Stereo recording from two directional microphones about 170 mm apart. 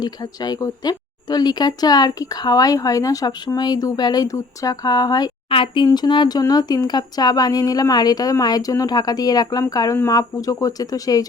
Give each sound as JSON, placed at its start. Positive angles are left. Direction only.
{"t": 0.0, "sound": "speech", "side_deg": 25}